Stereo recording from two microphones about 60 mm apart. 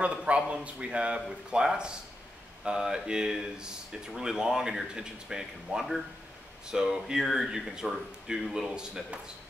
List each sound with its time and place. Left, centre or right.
0.0 s a man's voice: centre